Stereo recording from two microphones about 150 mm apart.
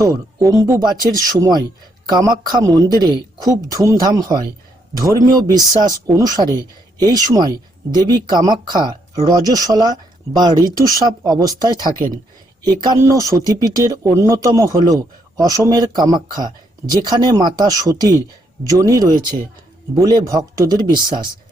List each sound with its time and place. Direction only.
0.0 s speech: 20° right (ahead or behind)